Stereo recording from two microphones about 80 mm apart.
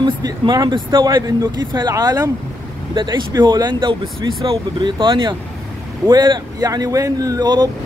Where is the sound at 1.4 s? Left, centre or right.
Right.